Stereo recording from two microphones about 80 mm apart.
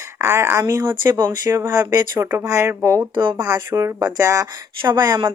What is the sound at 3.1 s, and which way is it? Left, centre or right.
Speech, right.